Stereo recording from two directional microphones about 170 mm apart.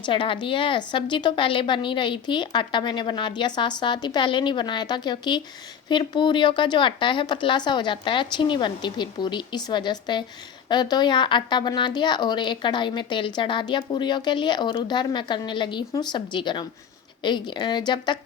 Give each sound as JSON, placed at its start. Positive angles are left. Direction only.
{"t": 0.0, "sound": "a woman's voice", "side_deg": 30}